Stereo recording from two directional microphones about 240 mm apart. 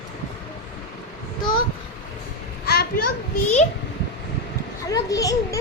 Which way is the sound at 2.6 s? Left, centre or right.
Left.